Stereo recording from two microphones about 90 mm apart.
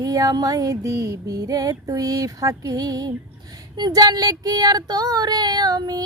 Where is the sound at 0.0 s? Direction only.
40° right (ahead or behind).